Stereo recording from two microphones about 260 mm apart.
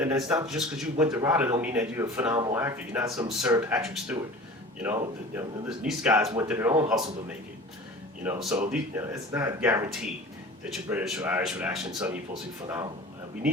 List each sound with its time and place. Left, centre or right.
0.0 s speech: centre
1.0 s speech: centre
8.2 s speech: centre